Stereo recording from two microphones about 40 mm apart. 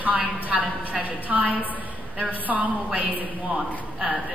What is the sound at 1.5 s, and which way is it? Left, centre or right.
Speech, left.